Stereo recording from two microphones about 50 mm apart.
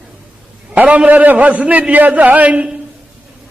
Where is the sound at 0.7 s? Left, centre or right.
Right.